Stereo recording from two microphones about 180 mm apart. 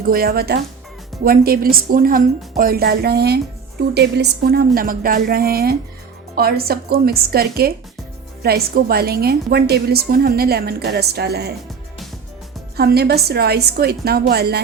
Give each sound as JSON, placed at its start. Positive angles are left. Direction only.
{"t": 0.0, "sound": "a woman's voice", "side_deg": -55}
{"t": 12.7, "sound": "a woman's voice", "side_deg": -60}